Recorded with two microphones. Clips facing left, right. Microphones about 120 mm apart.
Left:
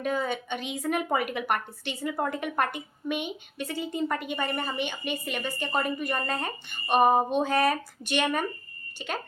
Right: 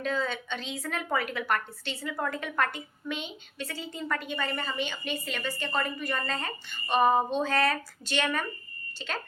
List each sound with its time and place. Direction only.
0.0 s a woman's voice: 15° left (ahead or behind)